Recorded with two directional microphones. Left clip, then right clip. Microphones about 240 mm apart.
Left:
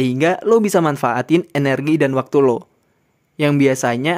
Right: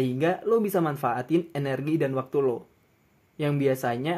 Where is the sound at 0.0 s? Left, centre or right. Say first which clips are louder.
Left 9 dB; left.